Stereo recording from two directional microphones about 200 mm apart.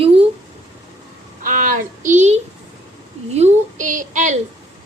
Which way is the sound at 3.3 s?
35° right (ahead or behind).